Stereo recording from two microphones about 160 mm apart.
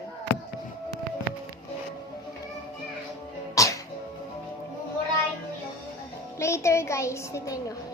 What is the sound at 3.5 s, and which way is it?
Music, 20° left (ahead or behind).